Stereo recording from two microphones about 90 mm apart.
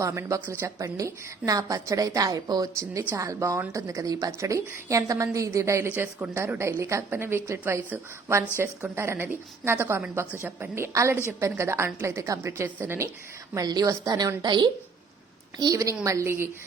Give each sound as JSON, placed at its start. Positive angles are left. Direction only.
{"t": 0.0, "sound": "a woman's voice", "side_deg": -35}
{"t": 11.1, "sound": "speech", "side_deg": -20}
{"t": 11.3, "sound": "a woman's voice", "side_deg": -30}
{"t": 13.7, "sound": "a woman's voice", "side_deg": -45}